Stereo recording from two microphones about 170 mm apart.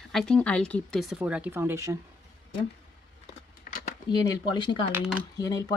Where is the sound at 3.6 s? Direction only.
55° left (ahead or behind).